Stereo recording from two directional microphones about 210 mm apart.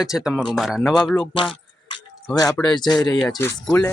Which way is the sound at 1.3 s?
25° left (ahead or behind).